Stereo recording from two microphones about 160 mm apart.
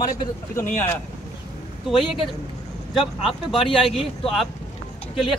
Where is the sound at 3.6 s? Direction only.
35° left (ahead or behind).